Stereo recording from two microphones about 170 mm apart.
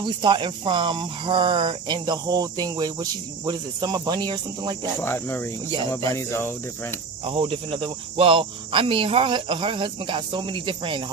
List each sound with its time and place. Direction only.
0.0 s speech: 30° right (ahead or behind)
5.0 s speech: 15° left (ahead or behind)
7.2 s speech: 30° right (ahead or behind)